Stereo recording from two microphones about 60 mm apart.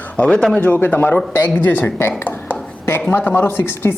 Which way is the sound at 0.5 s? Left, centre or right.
Left.